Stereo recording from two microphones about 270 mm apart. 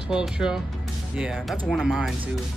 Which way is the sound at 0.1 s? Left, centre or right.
Centre.